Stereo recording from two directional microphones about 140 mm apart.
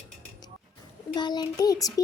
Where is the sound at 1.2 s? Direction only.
30° left (ahead or behind).